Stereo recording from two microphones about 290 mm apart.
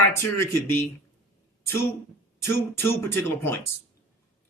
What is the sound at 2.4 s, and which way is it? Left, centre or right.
Speech, centre.